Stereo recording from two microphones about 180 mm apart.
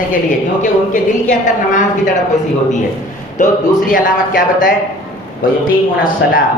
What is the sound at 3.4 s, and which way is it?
A woman's voice, 50° left (ahead or behind).